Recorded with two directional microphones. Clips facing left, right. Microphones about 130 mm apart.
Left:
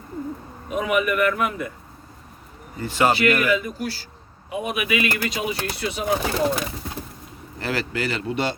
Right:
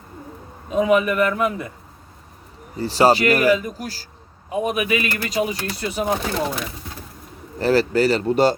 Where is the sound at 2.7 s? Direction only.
35° right (ahead or behind).